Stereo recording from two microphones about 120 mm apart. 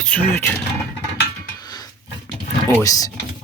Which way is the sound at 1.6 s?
35° left (ahead or behind).